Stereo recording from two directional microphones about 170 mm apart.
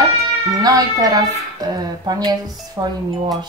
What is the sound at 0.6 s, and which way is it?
A woman's voice, 20° right (ahead or behind).